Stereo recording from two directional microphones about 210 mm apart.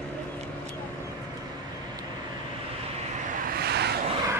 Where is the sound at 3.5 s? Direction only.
50° right (ahead or behind).